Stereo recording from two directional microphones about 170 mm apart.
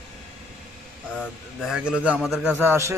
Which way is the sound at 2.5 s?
15° right (ahead or behind).